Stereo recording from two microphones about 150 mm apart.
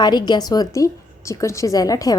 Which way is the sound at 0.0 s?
30° left (ahead or behind).